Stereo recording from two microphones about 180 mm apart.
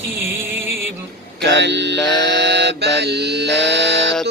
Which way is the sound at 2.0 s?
75° right (ahead or behind).